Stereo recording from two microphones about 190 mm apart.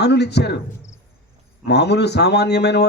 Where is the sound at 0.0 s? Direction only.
60° left (ahead or behind).